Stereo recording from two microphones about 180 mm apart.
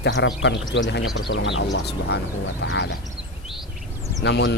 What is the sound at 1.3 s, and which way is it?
Speech, 90° left.